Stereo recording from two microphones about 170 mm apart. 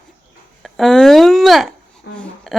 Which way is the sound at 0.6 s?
Centre (ahead or behind).